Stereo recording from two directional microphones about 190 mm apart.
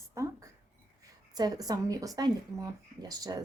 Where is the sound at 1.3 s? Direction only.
20° right (ahead or behind).